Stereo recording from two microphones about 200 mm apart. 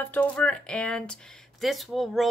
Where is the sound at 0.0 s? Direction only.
10° left (ahead or behind).